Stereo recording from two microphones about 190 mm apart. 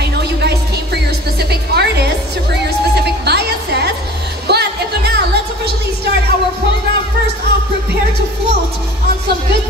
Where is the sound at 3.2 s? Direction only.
60° right (ahead or behind).